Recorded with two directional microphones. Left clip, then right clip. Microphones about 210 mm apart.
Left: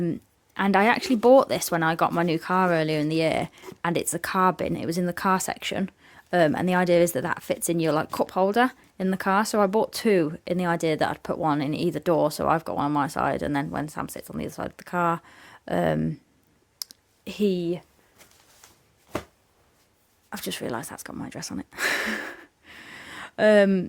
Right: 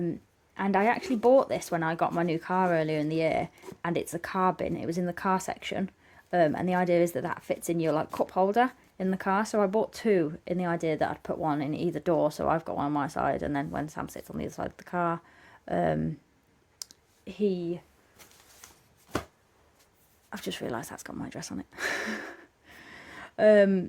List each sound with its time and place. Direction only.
0.0 s speech: 40° left (ahead or behind)
16.7 s clicking: 20° left (ahead or behind)
17.2 s speech: 40° left (ahead or behind)
20.3 s speech: 20° left (ahead or behind)